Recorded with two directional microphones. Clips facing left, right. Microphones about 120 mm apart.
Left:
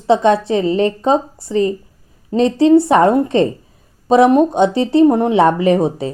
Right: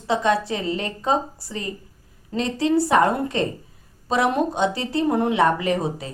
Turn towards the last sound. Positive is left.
turn(degrees=25)  # may be behind; listen again after turning